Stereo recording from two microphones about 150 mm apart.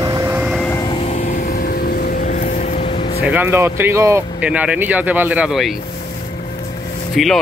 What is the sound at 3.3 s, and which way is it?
Speech, 15° right (ahead or behind).